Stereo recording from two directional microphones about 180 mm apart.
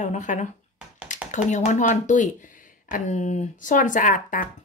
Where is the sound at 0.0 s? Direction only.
45° left (ahead or behind).